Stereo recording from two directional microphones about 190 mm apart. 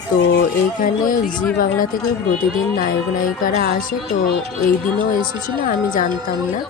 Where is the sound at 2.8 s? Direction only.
45° left (ahead or behind).